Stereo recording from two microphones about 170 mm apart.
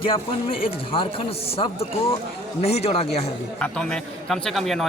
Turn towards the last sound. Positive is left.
turn(degrees=0)  # may be behind; listen again after turning